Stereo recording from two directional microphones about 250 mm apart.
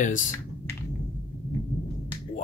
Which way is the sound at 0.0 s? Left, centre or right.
Left.